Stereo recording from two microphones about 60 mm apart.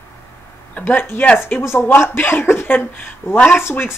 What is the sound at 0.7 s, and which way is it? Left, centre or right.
Speech, left.